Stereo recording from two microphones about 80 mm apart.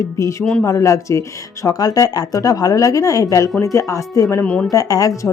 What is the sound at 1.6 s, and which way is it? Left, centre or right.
A woman's voice, left.